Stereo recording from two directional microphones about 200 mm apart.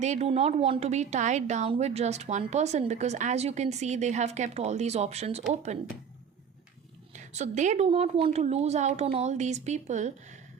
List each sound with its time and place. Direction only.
0.0 s a woman's voice: 35° right (ahead or behind)
7.1 s a woman's voice: 35° right (ahead or behind)